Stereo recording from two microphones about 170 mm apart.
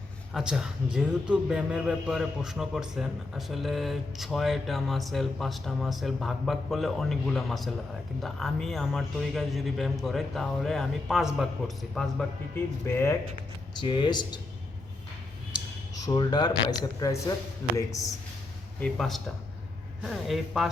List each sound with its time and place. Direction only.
0.3 s a man's voice: 5° right (ahead or behind)
12.5 s speech: 15° left (ahead or behind)
13.7 s speech: 25° left (ahead or behind)
16.0 s speech: 25° left (ahead or behind)
18.8 s a man's voice: centre (ahead or behind)